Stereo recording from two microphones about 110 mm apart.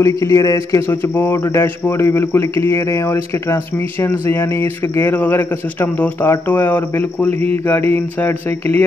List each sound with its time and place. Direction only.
0.0 s speech: 25° left (ahead or behind)